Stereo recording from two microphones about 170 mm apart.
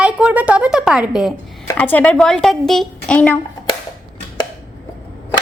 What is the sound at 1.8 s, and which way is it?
A child's voice, 10° left (ahead or behind).